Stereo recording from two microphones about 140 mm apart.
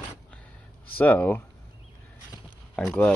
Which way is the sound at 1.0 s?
15° left (ahead or behind).